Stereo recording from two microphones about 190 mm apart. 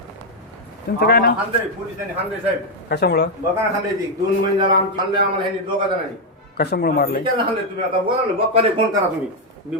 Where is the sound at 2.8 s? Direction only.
60° left (ahead or behind).